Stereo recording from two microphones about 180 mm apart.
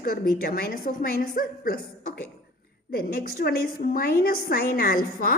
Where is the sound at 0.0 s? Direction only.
55° left (ahead or behind).